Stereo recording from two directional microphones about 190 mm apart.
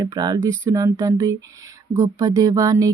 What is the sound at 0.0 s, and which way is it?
Speech, 20° right (ahead or behind).